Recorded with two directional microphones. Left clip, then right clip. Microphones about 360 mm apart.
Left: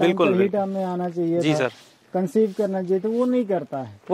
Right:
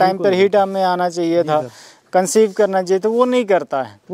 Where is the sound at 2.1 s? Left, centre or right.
Centre.